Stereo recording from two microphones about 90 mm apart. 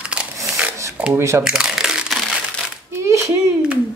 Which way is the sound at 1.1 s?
30° right (ahead or behind).